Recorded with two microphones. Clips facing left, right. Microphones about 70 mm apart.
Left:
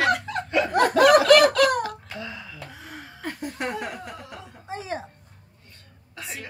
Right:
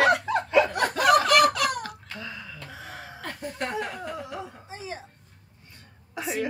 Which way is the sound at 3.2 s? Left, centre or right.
Centre.